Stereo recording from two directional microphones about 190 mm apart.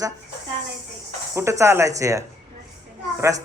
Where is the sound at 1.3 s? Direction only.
15° right (ahead or behind).